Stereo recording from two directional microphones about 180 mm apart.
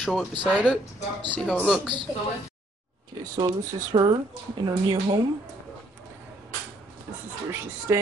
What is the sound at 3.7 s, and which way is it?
Speech, 25° right (ahead or behind).